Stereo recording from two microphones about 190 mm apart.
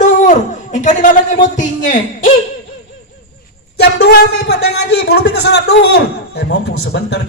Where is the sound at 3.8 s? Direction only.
60° left (ahead or behind).